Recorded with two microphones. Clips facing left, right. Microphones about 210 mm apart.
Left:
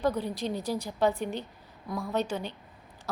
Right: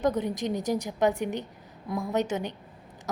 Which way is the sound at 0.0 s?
20° right (ahead or behind).